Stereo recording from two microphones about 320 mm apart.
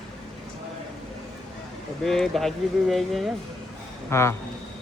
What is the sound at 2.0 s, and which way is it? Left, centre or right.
Speech, centre.